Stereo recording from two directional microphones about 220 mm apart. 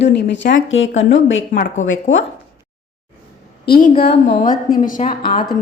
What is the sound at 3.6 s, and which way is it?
A woman's voice, 45° left (ahead or behind).